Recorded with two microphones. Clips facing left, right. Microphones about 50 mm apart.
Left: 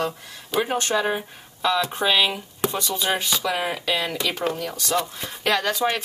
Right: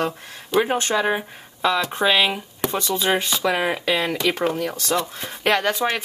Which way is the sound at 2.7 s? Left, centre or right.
Right.